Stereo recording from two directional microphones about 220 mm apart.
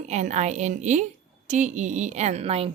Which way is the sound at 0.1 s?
30° right (ahead or behind).